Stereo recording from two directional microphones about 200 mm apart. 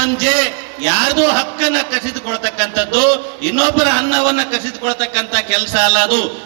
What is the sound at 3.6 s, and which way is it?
A man's voice, 25° left (ahead or behind).